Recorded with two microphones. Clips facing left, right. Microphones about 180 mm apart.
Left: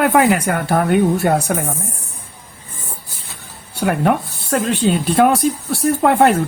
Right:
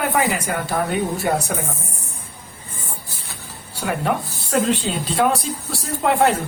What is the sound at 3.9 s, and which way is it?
Speech, 60° left (ahead or behind).